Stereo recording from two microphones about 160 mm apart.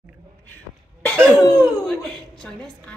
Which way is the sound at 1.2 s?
Centre (ahead or behind).